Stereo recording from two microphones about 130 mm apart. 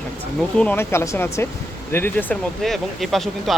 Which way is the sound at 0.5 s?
10° left (ahead or behind).